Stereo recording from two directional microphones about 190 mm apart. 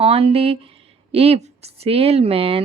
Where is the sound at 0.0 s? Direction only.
30° right (ahead or behind).